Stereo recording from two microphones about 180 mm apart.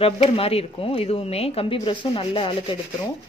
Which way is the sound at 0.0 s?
30° left (ahead or behind).